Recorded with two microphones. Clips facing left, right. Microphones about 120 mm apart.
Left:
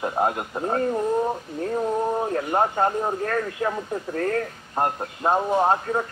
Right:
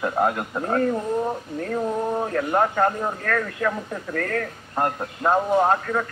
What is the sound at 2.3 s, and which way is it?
Speech, 20° left (ahead or behind).